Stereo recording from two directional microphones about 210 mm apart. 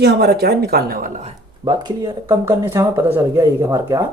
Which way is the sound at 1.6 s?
20° right (ahead or behind).